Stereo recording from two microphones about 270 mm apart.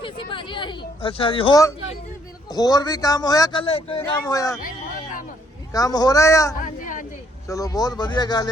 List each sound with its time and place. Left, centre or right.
0.0 s a man's voice: centre
5.7 s a man's voice: centre
6.6 s a sound: left
7.4 s a man's voice: centre